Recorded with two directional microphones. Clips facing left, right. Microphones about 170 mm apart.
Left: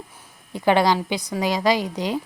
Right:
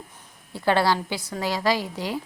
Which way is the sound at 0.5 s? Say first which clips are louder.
Left 3 dB; 15° left (ahead or behind).